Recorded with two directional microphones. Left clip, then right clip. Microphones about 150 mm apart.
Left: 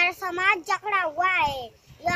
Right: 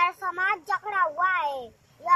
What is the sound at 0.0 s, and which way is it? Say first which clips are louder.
A child's voice: left 2 dB; 30° left (ahead or behind).